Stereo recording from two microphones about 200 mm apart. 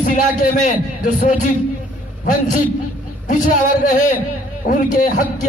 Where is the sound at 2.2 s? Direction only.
45° left (ahead or behind).